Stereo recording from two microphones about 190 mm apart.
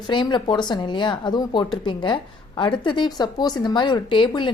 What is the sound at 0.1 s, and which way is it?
Speech, 25° left (ahead or behind).